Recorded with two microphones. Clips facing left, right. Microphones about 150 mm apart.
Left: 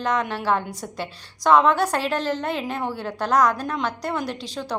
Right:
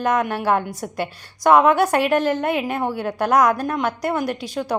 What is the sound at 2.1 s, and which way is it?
Speech, 55° right (ahead or behind).